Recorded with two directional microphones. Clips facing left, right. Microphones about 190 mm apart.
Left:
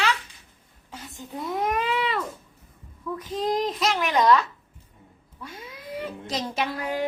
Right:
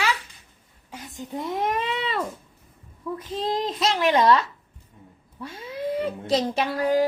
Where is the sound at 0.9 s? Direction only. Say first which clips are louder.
Right 3 dB; 15° right (ahead or behind).